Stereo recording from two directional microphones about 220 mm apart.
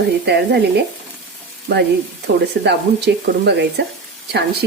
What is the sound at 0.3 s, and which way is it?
Speech, 50° right (ahead or behind).